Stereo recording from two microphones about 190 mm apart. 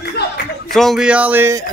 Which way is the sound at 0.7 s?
Centre (ahead or behind).